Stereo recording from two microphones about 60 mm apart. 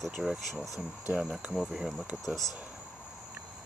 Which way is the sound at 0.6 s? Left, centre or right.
Left.